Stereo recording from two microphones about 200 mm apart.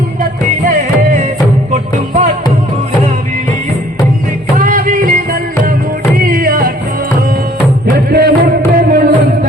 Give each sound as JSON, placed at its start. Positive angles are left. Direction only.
{"t": 1.7, "sound": "music", "side_deg": -35}
{"t": 4.6, "sound": "music", "side_deg": -45}
{"t": 7.9, "sound": "music", "side_deg": -45}